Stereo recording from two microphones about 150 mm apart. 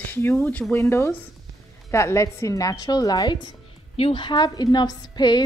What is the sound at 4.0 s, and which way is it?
A woman's voice, 35° left (ahead or behind).